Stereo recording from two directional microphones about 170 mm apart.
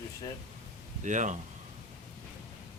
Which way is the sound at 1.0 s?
45° right (ahead or behind).